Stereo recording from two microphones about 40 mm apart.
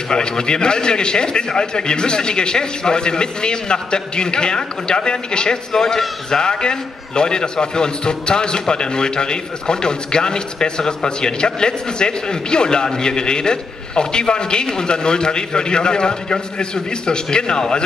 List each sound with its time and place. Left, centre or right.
0.1 s a man's voice: left
5.7 s a man's voice: centre